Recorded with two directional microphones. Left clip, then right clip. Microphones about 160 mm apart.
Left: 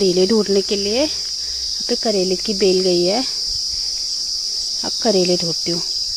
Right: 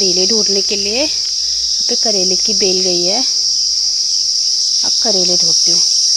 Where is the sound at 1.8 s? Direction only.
30° left (ahead or behind).